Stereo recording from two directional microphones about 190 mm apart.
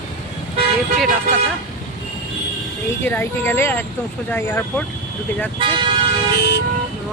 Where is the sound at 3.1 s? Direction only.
10° left (ahead or behind).